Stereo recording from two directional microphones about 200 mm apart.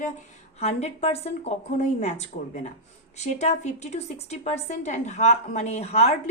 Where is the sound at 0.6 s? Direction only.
30° left (ahead or behind).